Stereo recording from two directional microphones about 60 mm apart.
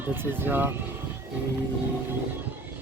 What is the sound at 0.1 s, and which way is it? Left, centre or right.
Speech, right.